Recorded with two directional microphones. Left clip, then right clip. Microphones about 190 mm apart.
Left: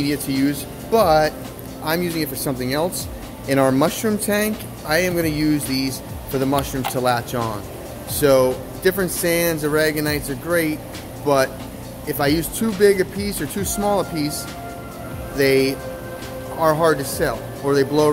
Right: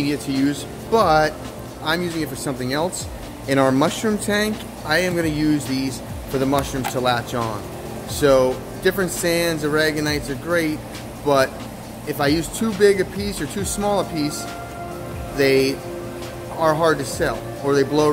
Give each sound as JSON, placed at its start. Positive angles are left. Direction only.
{"t": 0.0, "sound": "speech", "side_deg": 5}
{"t": 1.9, "sound": "speech", "side_deg": 15}
{"t": 15.3, "sound": "speech", "side_deg": 10}